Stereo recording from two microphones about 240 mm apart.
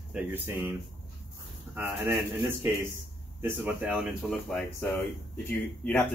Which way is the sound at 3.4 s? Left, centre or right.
Centre.